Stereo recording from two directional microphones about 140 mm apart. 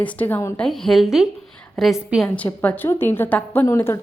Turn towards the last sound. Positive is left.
turn(degrees=20)  # may be behind; listen again after turning